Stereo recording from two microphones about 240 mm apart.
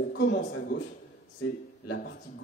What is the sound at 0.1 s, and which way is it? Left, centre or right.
Speech, left.